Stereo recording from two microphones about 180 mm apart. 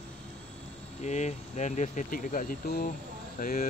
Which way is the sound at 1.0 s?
40° left (ahead or behind).